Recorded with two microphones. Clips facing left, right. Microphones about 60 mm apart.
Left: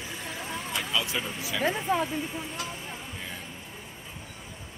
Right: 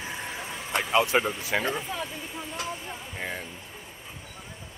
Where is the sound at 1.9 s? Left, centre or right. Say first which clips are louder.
Left 7 dB; left.